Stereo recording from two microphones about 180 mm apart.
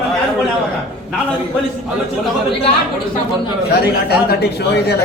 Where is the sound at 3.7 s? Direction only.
65° left (ahead or behind).